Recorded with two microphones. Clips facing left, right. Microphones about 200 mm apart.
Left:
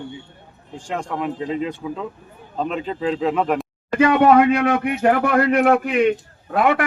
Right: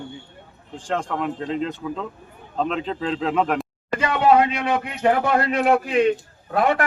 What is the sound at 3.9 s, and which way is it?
Speech, 55° left (ahead or behind).